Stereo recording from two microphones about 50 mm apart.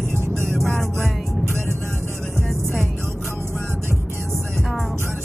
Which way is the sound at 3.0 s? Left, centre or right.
Right.